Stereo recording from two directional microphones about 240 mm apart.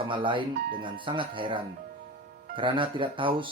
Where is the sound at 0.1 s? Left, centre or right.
Right.